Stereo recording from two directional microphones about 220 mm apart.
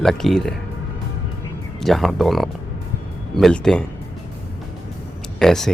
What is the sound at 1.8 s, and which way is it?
Speech, centre (ahead or behind).